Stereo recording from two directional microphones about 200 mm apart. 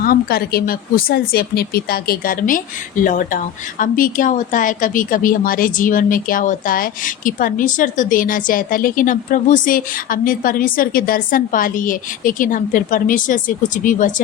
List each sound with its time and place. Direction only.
0.0 s speech: 50° left (ahead or behind)